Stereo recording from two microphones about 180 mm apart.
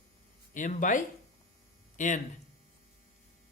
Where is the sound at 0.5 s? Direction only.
45° left (ahead or behind).